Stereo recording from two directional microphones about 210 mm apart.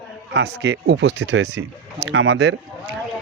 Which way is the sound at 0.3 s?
55° right (ahead or behind).